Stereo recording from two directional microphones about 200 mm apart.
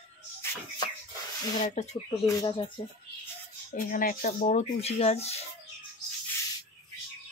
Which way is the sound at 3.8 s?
45° left (ahead or behind).